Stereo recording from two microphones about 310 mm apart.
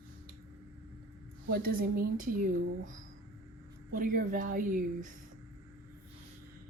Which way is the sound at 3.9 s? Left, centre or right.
Right.